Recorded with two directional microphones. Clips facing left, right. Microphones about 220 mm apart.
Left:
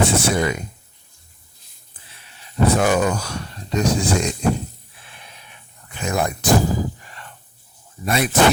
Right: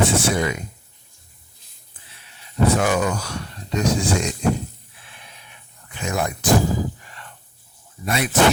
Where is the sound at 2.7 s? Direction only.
35° left (ahead or behind).